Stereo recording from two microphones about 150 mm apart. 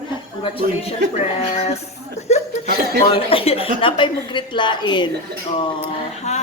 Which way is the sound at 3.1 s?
40° left (ahead or behind).